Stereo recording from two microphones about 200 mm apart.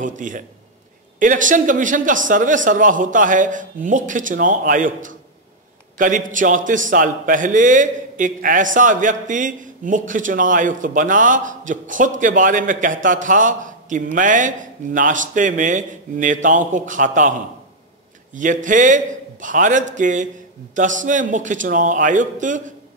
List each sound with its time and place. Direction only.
0.0 s a man's voice: 40° right (ahead or behind)
18.3 s a man's voice: 40° right (ahead or behind)